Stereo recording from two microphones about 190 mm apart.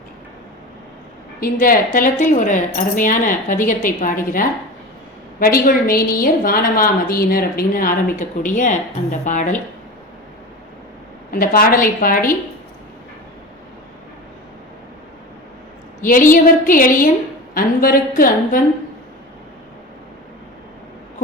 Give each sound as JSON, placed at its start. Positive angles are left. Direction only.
{"t": 1.4, "sound": "speech", "side_deg": 45}
{"t": 11.3, "sound": "speech", "side_deg": 50}
{"t": 16.0, "sound": "speech", "side_deg": 45}